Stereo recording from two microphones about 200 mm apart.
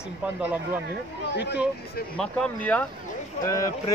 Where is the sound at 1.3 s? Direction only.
55° left (ahead or behind).